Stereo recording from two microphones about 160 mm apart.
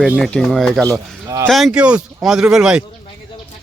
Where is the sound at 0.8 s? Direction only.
20° right (ahead or behind).